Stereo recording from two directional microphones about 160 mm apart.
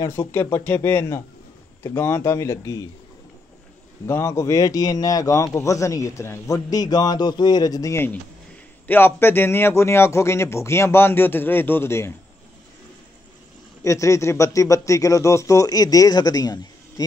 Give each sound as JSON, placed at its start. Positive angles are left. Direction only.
{"t": 0.0, "sound": "a man's voice", "side_deg": 15}
{"t": 4.0, "sound": "a man's voice", "side_deg": 15}
{"t": 13.8, "sound": "a man's voice", "side_deg": 20}